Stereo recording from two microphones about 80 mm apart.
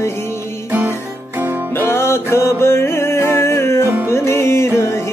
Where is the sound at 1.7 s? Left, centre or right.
Left.